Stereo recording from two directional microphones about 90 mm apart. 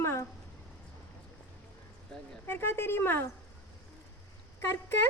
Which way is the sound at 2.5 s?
25° left (ahead or behind).